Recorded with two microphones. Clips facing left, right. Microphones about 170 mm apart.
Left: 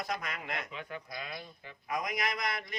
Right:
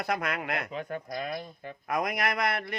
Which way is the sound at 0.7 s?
45° right (ahead or behind).